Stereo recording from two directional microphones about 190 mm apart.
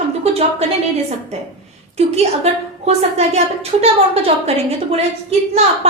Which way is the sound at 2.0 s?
35° right (ahead or behind).